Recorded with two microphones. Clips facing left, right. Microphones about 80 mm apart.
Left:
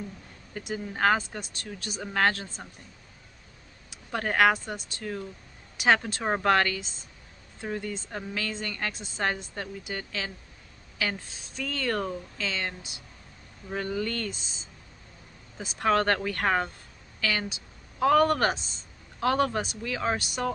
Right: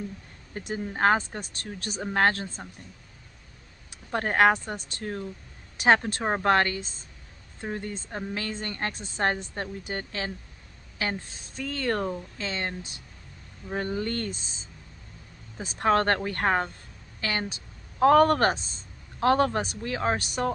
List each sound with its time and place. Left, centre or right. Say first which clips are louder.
0.6 s speech: right 2 dB; right
4.1 s speech: right 2 dB; right
6.4 s speech: right 1 dB; right
15.6 s a woman's voice: right 1 dB; right